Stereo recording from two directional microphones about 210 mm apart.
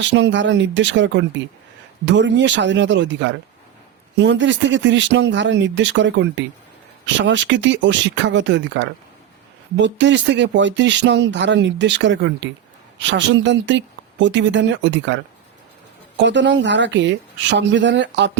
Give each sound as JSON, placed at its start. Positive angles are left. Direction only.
{"t": 0.0, "sound": "speech", "side_deg": -60}